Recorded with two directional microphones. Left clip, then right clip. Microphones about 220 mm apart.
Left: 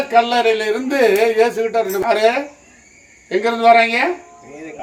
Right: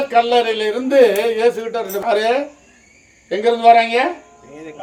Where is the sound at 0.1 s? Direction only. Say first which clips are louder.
Left 1 dB; 5° left (ahead or behind).